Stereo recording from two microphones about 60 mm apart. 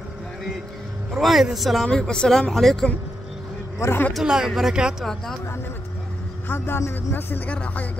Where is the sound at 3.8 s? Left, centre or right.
Left.